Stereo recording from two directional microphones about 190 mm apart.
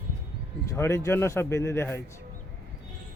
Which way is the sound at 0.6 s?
15° left (ahead or behind).